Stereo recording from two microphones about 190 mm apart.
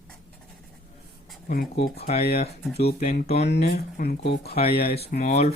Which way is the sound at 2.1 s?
30° left (ahead or behind).